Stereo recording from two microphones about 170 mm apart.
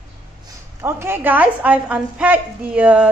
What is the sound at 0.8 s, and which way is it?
A woman's voice, 15° right (ahead or behind).